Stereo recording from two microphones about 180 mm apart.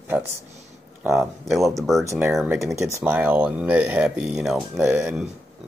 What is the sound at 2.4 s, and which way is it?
Speech, centre (ahead or behind).